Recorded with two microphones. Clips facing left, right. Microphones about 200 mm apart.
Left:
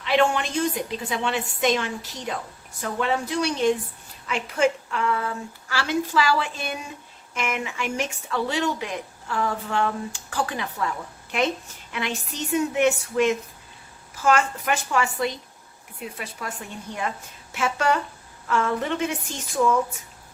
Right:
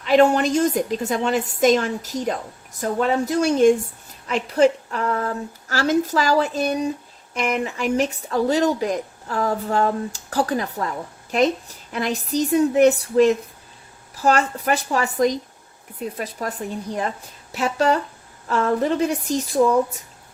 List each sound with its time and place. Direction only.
0.0 s speech: 40° right (ahead or behind)